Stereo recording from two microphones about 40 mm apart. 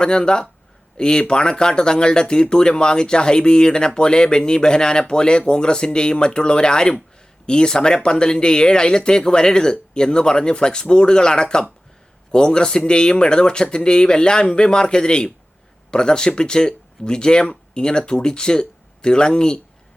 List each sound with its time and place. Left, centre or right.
0.0 s a man's voice: left